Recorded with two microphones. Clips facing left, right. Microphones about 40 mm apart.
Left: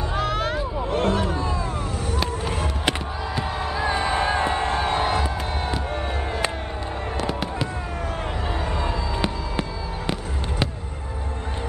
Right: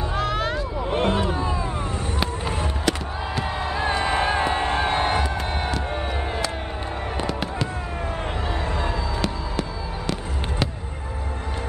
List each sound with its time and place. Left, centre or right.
0.1 s vehicle: centre
0.8 s music: right
2.1 s fireworks: centre
3.5 s crowd: centre
4.0 s music: centre
9.2 s fireworks: centre